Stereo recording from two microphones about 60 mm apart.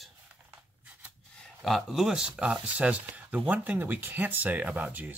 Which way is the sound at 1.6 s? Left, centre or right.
Centre.